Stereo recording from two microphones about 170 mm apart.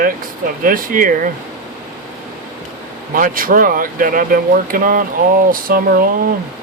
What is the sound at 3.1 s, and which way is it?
Speech, 55° right (ahead or behind).